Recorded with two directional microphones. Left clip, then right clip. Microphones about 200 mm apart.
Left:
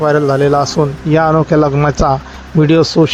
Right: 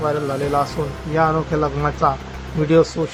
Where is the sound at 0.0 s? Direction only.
35° left (ahead or behind).